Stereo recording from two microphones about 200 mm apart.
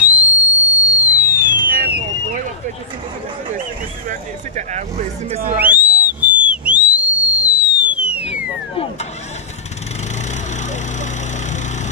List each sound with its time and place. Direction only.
0.0 s whistle: 5° right (ahead or behind)
1.7 s a sound: 50° right (ahead or behind)
4.1 s speech: 35° right (ahead or behind)
5.6 s whistle: 5° right (ahead or behind)